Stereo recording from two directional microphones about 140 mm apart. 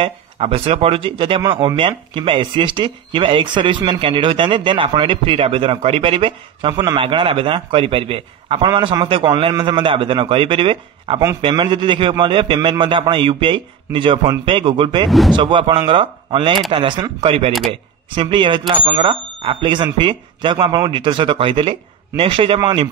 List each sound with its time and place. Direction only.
0.0 s speech: 45° right (ahead or behind)
8.6 s speech: 30° right (ahead or behind)
15.0 s speech: centre (ahead or behind)
15.3 s speech: 35° right (ahead or behind)